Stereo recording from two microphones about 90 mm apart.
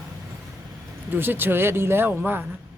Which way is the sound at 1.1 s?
25° right (ahead or behind).